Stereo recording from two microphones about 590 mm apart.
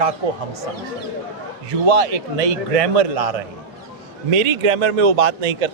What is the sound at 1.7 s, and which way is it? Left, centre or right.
A man's voice, right.